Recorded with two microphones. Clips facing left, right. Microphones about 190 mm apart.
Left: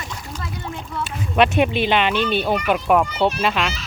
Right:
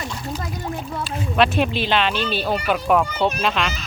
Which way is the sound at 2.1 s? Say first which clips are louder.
Left 4 dB; 60° left (ahead or behind).